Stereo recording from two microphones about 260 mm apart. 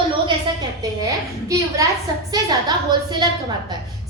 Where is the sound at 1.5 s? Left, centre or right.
Centre.